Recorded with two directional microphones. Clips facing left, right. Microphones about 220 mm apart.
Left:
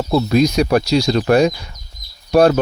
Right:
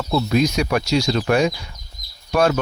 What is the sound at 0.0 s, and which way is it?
Speech, 40° left (ahead or behind).